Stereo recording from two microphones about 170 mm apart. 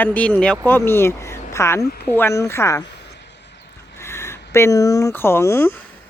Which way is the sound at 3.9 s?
15° left (ahead or behind).